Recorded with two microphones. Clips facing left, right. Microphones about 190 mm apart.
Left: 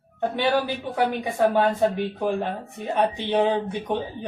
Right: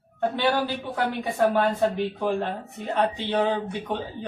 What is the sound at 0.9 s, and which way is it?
Speech, 15° left (ahead or behind).